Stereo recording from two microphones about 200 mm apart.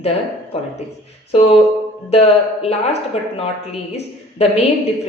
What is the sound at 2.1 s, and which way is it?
A woman's voice, 30° left (ahead or behind).